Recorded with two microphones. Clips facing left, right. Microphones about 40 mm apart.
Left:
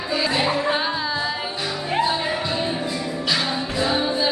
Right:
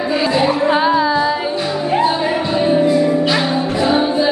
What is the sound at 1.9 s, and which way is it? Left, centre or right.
Music, right.